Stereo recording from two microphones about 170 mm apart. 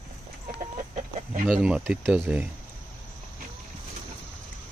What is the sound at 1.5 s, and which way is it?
Speech, 5° right (ahead or behind).